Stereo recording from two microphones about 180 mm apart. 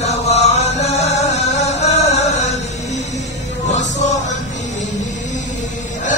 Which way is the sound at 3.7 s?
40° left (ahead or behind).